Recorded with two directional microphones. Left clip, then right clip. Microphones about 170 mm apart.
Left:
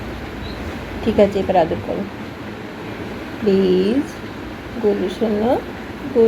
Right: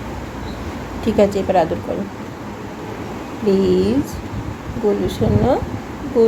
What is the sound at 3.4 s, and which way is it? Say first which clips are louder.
Speech: even; 5° left (ahead or behind).